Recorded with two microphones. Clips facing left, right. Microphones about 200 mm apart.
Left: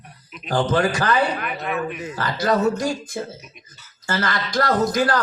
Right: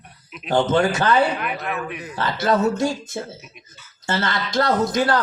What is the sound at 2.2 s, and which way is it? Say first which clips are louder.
A man's voice: right 1 dB; 25° right (ahead or behind).